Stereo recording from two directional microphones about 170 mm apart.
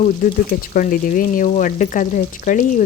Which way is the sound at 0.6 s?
55° left (ahead or behind).